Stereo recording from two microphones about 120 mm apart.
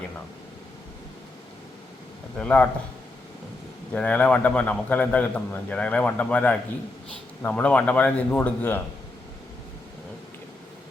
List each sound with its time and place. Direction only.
2.4 s a man's voice: 10° left (ahead or behind)
3.9 s a man's voice: 10° left (ahead or behind)